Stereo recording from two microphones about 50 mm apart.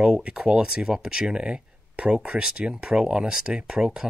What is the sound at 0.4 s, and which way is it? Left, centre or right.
Speech, centre.